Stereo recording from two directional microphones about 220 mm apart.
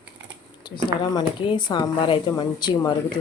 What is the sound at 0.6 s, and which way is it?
Speech, 20° left (ahead or behind).